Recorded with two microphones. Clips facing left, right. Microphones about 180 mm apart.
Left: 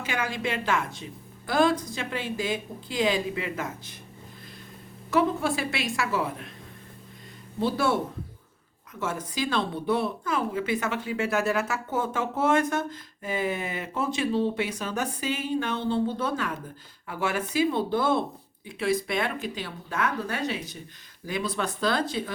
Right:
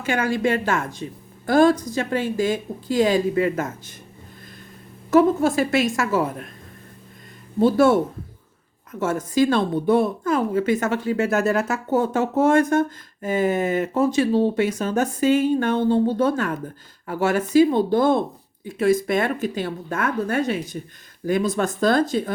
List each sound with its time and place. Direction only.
0.0 s a woman's voice: 50° right (ahead or behind)
5.1 s a woman's voice: 45° right (ahead or behind)
7.6 s a woman's voice: 50° right (ahead or behind)